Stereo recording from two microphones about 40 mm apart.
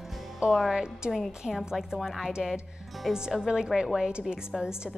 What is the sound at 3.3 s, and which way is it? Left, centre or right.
Speech, centre.